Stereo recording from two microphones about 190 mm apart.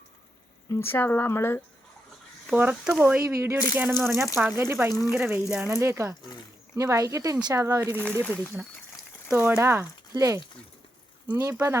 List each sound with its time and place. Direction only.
0.7 s speech: 10° left (ahead or behind)
2.5 s speech: 5° right (ahead or behind)
4.9 s speech: 20° left (ahead or behind)
5.1 s speech: 10° right (ahead or behind)
8.2 s speech: 10° left (ahead or behind)
9.3 s speech: 15° right (ahead or behind)